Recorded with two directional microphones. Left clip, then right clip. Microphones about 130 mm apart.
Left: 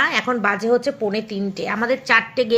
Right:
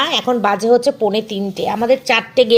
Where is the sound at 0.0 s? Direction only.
25° right (ahead or behind).